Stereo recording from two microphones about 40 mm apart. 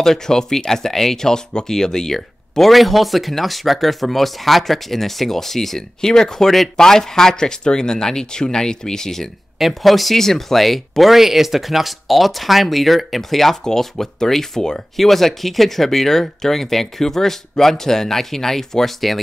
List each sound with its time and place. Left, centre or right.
0.0 s speech: centre
9.6 s speech: centre